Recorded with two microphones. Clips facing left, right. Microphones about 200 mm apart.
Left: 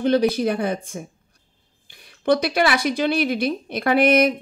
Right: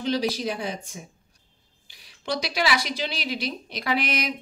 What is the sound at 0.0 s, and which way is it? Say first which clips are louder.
Speech: left 7 dB; 55° left (ahead or behind).